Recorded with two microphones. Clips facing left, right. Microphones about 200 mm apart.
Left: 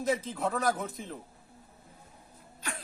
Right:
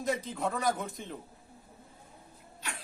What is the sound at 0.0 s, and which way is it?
A man's voice, centre (ahead or behind).